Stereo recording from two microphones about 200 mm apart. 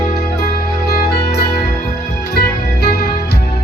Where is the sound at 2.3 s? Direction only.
50° left (ahead or behind).